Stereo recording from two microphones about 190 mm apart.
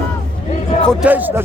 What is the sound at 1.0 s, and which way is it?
Speech, 10° right (ahead or behind).